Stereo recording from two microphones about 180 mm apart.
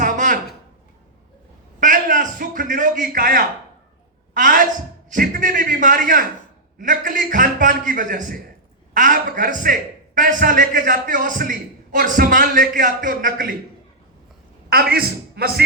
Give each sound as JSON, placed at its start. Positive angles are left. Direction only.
{"t": 0.0, "sound": "a sound", "side_deg": -45}
{"t": 1.8, "sound": "a man's voice", "side_deg": -50}
{"t": 14.7, "sound": "a man's voice", "side_deg": -55}